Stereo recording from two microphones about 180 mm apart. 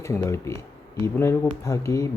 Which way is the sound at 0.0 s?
15° left (ahead or behind).